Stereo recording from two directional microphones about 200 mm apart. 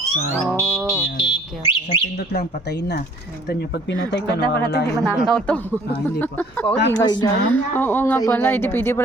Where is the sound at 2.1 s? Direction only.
55° left (ahead or behind).